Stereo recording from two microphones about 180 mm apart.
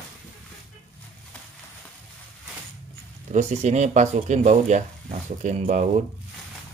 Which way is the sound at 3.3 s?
40° right (ahead or behind).